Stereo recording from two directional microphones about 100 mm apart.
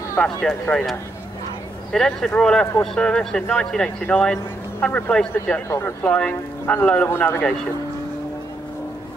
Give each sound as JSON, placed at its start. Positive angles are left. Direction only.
{"t": 0.2, "sound": "speech", "side_deg": 10}
{"t": 5.3, "sound": "a man's voice", "side_deg": 25}
{"t": 6.0, "sound": "speech", "side_deg": 10}
{"t": 7.1, "sound": "a man's voice", "side_deg": 25}